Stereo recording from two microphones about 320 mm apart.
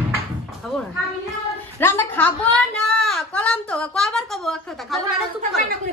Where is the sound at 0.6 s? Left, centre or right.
Centre.